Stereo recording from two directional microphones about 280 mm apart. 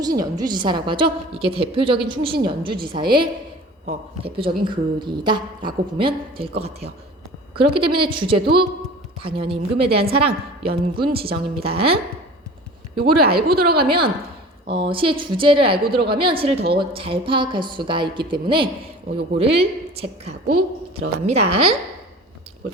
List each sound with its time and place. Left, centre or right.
0.2 s a woman's voice: centre
13.0 s a woman's voice: right
13.8 s a woman's voice: centre